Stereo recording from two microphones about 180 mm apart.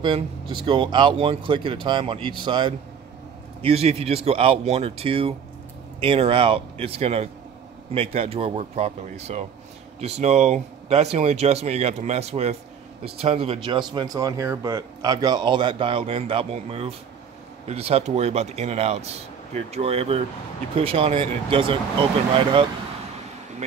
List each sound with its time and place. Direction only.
0.0 s speech: 25° right (ahead or behind)